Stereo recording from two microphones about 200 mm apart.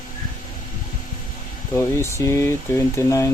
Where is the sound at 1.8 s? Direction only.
15° left (ahead or behind).